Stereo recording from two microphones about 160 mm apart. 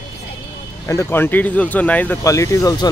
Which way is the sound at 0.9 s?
15° left (ahead or behind).